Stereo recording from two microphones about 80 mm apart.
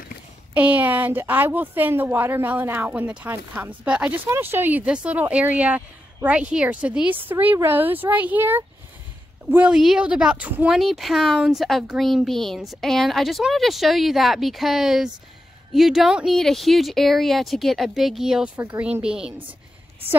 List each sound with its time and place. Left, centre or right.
0.6 s speech: right
2.9 s speech: centre
9.7 s a woman's voice: centre
10.7 s a woman's voice: centre
18.8 s speech: centre